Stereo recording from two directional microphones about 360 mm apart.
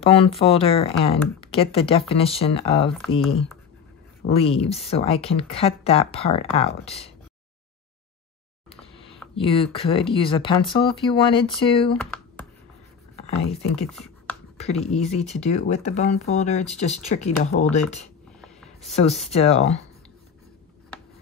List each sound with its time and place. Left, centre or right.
0.0 s speech: centre
9.3 s speech: centre
13.3 s speech: centre
15.1 s speech: centre
18.4 s a sound: centre
19.2 s speech: centre